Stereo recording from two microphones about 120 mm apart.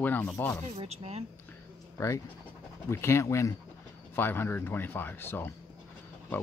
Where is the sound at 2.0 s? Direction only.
25° left (ahead or behind).